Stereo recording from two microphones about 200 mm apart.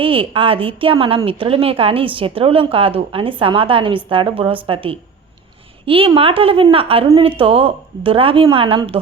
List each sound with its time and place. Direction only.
0.0 s a woman's voice: 25° right (ahead or behind)